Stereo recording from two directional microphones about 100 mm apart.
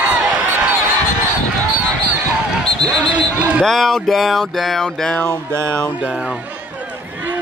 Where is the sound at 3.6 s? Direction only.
5° left (ahead or behind).